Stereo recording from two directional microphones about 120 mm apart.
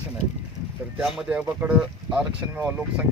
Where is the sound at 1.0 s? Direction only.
Centre (ahead or behind).